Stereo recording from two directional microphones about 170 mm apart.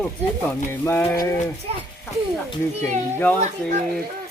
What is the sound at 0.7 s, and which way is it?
Speech, 15° left (ahead or behind).